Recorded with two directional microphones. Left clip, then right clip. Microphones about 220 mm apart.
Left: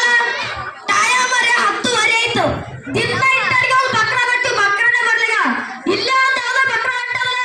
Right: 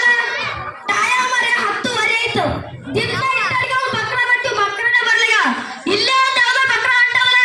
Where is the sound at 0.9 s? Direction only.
50° left (ahead or behind).